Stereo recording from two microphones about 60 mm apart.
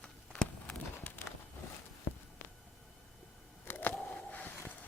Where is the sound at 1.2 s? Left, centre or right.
Left.